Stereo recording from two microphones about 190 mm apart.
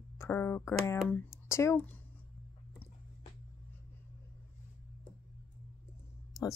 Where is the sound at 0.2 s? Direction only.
10° left (ahead or behind).